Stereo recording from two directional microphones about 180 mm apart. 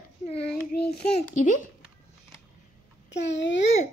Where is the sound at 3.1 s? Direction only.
80° left.